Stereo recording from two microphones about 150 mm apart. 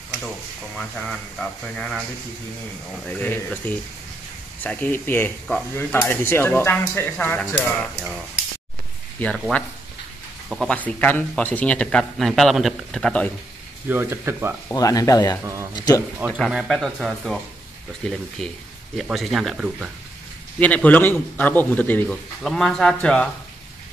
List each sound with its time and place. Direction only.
0.7 s speech: 5° left (ahead or behind)
3.1 s speech: 10° left (ahead or behind)
9.2 s speech: 5° left (ahead or behind)
10.7 s speech: 10° left (ahead or behind)
13.8 s speech: 15° right (ahead or behind)
14.7 s speech: 25° left (ahead or behind)
15.4 s speech: 20° right (ahead or behind)
15.7 s speech: 25° left (ahead or behind)
16.3 s speech: centre (ahead or behind)
20.5 s speech: 10° left (ahead or behind)
22.4 s speech: centre (ahead or behind)